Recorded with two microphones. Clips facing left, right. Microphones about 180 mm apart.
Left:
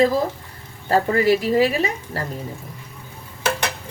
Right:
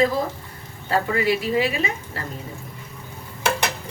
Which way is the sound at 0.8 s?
45° left (ahead or behind).